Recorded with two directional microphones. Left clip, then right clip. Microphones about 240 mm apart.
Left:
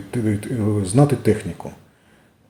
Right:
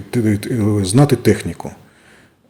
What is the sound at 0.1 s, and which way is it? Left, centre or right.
Speech, right.